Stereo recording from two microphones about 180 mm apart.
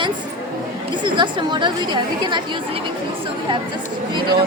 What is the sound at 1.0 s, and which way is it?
A woman's voice, 25° right (ahead or behind).